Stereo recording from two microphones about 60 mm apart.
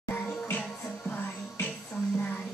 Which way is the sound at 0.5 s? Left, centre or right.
Left.